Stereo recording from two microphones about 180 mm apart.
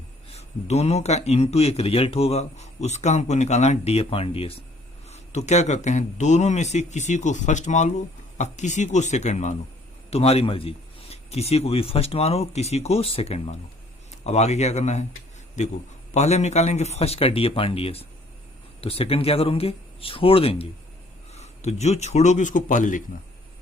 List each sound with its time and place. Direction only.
0.3 s speech: 35° left (ahead or behind)